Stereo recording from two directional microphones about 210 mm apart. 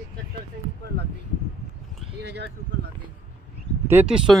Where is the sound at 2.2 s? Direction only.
55° right (ahead or behind).